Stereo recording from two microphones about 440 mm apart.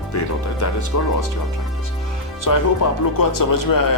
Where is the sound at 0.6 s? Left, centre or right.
Left.